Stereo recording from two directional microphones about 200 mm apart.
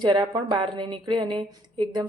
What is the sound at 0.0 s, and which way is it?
A woman's voice, 20° right (ahead or behind).